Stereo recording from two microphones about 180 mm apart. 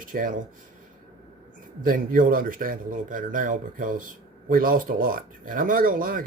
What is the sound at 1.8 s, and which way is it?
Speech, 50° right (ahead or behind).